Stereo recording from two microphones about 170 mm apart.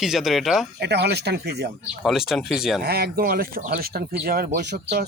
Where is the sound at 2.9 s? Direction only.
65° right (ahead or behind).